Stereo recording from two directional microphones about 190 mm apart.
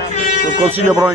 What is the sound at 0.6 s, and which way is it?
Speech, 10° right (ahead or behind).